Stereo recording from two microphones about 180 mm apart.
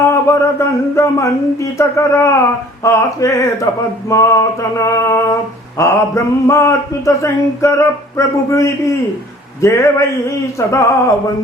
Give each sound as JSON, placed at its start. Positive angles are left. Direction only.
{"t": 0.1, "sound": "male singing", "side_deg": 15}